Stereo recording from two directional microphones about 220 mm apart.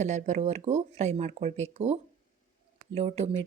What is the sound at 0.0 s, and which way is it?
A woman's voice, 35° right (ahead or behind).